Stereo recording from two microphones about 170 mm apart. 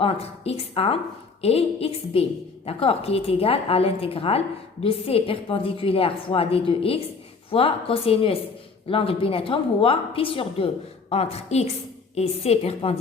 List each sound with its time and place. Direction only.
0.0 s a woman's voice: 35° left (ahead or behind)